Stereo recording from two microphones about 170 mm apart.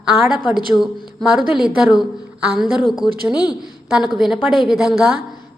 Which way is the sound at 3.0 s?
25° left (ahead or behind).